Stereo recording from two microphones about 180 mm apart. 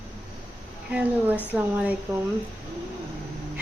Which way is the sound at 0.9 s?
10° right (ahead or behind).